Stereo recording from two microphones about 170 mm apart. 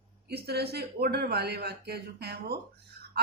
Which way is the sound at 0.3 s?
70° right (ahead or behind).